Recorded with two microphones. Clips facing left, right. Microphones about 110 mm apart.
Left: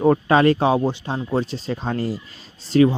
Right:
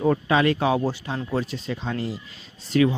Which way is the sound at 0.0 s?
40° left (ahead or behind).